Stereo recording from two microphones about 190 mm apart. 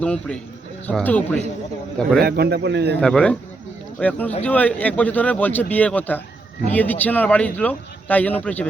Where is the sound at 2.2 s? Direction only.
55° right (ahead or behind).